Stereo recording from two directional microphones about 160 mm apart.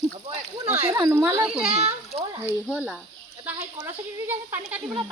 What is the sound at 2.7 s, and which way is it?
A woman's voice, 5° right (ahead or behind).